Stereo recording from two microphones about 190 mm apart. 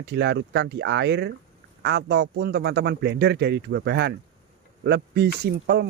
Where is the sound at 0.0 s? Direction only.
60° right (ahead or behind).